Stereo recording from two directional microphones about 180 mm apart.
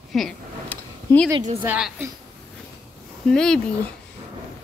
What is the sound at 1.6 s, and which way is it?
Speech, 10° right (ahead or behind).